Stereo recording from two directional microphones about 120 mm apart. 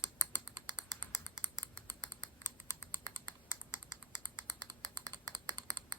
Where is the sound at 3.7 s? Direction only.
35° right (ahead or behind).